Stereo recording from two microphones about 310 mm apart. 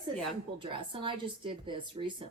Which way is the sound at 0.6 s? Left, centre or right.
Centre.